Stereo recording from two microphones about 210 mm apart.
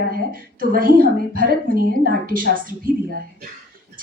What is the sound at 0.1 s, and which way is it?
A woman's voice, 40° right (ahead or behind).